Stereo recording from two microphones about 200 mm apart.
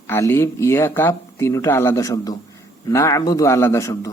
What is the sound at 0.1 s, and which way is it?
A man's voice, 10° left (ahead or behind).